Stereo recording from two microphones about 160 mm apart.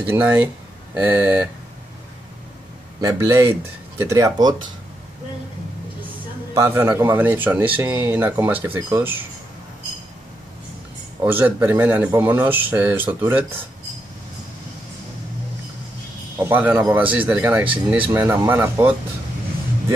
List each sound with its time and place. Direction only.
0.1 s a man's voice: 10° right (ahead or behind)
3.0 s a man's voice: 20° right (ahead or behind)
6.5 s a man's voice: 15° right (ahead or behind)
11.2 s a man's voice: 10° right (ahead or behind)
16.3 s a man's voice: 15° right (ahead or behind)